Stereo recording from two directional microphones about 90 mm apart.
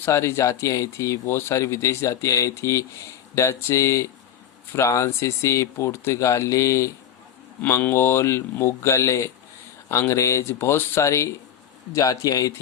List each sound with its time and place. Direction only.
0.0 s speech: 30° left (ahead or behind)